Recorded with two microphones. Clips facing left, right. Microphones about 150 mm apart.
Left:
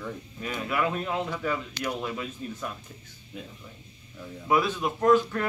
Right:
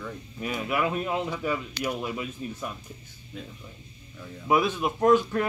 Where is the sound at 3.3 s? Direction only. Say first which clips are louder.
Right 1 dB; 5° left (ahead or behind).